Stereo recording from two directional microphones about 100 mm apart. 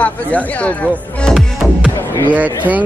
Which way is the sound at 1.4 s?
5° right (ahead or behind).